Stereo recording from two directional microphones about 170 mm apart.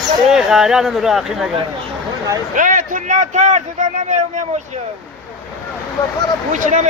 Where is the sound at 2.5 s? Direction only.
50° right (ahead or behind).